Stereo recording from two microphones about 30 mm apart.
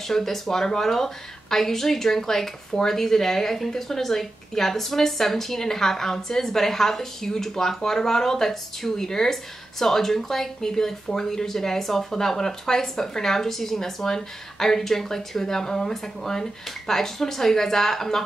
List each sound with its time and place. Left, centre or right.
0.0 s a woman's voice: centre